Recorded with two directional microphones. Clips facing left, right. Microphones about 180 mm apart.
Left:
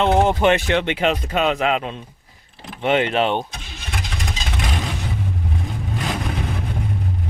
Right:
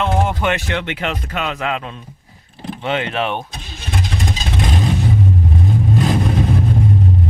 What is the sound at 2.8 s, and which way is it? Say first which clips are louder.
Speech: left 3 dB; 20° left (ahead or behind).